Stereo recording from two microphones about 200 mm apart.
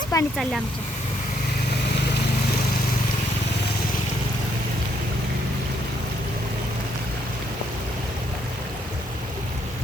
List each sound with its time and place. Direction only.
0.1 s speech: 15° left (ahead or behind)